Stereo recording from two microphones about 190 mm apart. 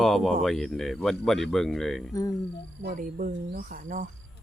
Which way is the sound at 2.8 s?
45° right (ahead or behind).